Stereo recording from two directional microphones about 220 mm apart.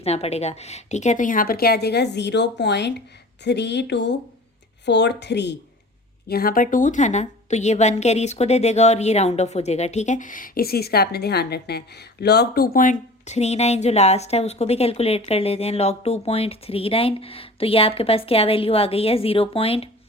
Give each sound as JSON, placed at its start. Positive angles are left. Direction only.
{"t": 0.0, "sound": "a woman's voice", "side_deg": 30}